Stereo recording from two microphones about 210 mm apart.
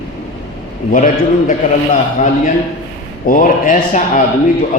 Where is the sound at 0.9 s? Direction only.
35° left (ahead or behind).